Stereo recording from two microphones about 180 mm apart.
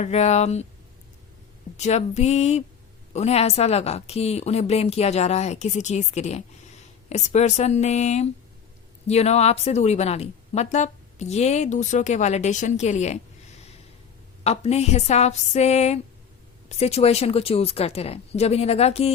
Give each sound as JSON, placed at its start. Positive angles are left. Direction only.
{"t": 0.0, "sound": "a woman's voice", "side_deg": 40}
{"t": 1.7, "sound": "a woman's voice", "side_deg": 40}
{"t": 14.4, "sound": "a woman's voice", "side_deg": 35}